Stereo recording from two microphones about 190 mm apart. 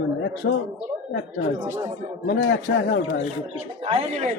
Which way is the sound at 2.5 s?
85° left.